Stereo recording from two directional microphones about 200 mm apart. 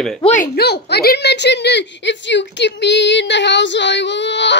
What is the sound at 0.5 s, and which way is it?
A woman's voice, 55° left (ahead or behind).